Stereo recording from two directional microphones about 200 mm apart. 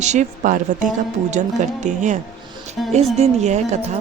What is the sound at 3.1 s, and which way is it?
Speech, 35° right (ahead or behind).